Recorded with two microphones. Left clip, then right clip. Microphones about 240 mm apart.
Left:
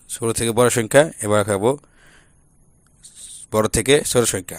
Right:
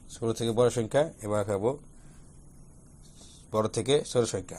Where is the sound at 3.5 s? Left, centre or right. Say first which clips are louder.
Left 9 dB; left.